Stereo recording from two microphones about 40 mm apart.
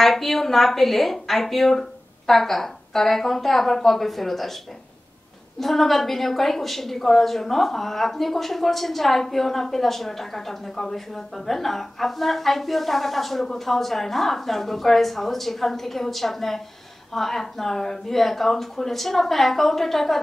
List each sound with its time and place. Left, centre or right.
0.0 s a woman's voice: centre
5.6 s a woman's voice: centre